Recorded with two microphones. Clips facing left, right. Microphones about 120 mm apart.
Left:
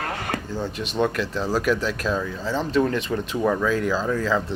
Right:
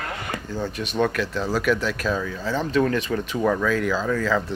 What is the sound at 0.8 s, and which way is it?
Speech, 25° left (ahead or behind).